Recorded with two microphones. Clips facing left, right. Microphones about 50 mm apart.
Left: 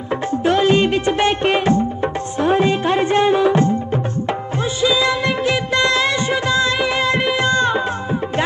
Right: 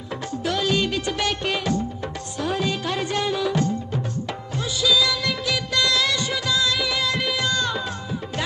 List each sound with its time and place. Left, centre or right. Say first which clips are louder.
0.5 s music: left 8 dB; left
4.8 s music of bollywood: left 4 dB; left